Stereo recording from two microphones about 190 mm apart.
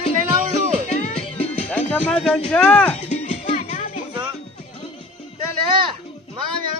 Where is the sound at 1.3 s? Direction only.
5° left (ahead or behind).